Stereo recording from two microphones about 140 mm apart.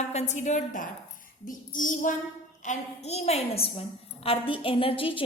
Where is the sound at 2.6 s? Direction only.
55° left (ahead or behind).